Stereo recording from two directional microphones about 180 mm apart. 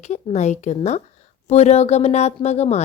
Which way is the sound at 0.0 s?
40° left (ahead or behind).